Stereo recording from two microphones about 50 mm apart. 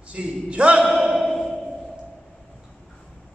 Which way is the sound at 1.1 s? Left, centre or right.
Centre.